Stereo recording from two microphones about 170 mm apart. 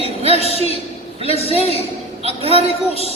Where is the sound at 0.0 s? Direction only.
35° right (ahead or behind).